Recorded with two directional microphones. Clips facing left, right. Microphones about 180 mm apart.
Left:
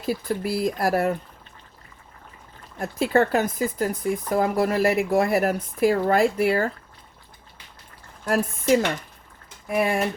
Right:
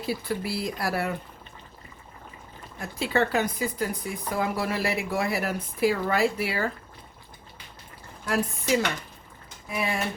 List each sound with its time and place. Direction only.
0.0 s speech: 45° left (ahead or behind)
2.7 s speech: 50° left (ahead or behind)
8.2 s speech: 45° left (ahead or behind)